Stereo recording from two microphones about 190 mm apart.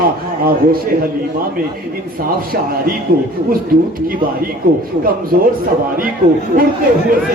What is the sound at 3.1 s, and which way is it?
Speech, 50° right (ahead or behind).